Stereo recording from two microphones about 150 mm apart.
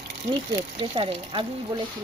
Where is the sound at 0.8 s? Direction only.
35° right (ahead or behind).